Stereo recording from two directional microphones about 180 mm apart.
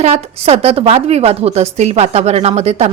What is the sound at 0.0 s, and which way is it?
Speech, 35° right (ahead or behind).